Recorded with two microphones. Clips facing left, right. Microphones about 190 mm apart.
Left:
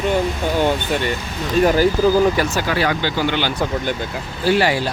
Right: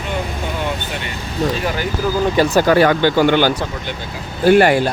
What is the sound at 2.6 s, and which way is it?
Speech, 50° right (ahead or behind).